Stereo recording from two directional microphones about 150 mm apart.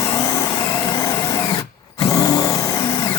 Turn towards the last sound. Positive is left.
turn(degrees=25)  # may be behind; listen again after turning